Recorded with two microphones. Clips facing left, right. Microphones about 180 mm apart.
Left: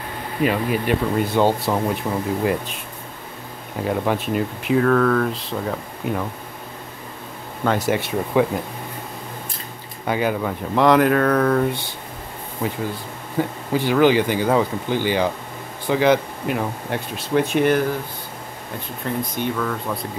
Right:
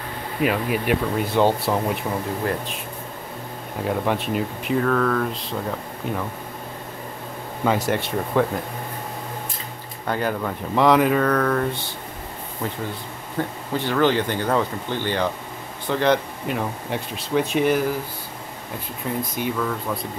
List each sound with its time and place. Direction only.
0.4 s speech: 5° right (ahead or behind)
3.8 s speech: centre (ahead or behind)
7.6 s speech: centre (ahead or behind)
10.0 s speech: 5° left (ahead or behind)
19.0 s speech: 5° right (ahead or behind)